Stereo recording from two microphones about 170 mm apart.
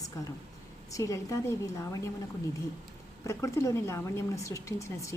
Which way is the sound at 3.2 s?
15° left (ahead or behind).